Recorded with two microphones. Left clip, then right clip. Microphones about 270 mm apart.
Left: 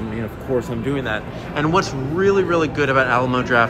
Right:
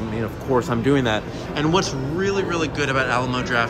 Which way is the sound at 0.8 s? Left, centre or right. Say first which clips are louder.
Right 3 dB; right.